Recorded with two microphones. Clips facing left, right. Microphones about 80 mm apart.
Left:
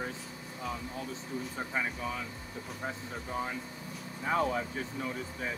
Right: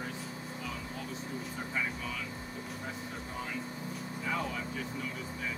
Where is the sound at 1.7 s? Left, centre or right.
Left.